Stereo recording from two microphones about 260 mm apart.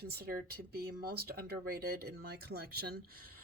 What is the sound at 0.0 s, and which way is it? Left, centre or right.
Speech, right.